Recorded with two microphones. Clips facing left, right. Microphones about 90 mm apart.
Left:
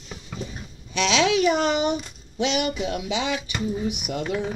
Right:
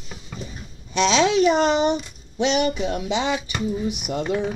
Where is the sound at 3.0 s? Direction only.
35° right (ahead or behind).